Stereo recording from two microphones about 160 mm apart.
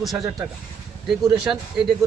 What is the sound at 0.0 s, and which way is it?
Speech, centre (ahead or behind).